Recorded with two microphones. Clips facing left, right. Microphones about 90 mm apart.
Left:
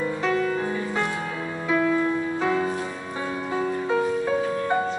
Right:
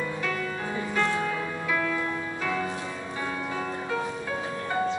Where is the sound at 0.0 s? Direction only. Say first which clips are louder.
Left 6 dB; 25° left (ahead or behind).